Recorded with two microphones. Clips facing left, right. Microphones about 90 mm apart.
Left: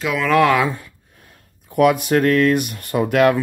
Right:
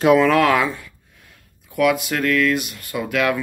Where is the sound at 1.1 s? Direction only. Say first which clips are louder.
Left 2 dB; 40° left (ahead or behind).